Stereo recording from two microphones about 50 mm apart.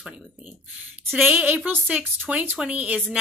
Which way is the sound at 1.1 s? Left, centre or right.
Right.